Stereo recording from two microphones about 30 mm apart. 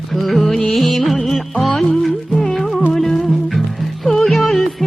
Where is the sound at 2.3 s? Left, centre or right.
Centre.